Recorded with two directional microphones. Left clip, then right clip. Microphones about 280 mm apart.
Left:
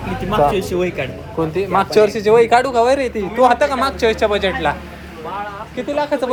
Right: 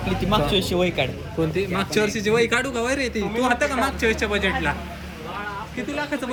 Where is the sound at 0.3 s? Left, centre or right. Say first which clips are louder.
Left 7 dB; centre.